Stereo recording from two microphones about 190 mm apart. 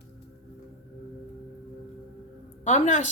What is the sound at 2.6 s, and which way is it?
Speech, 40° left (ahead or behind).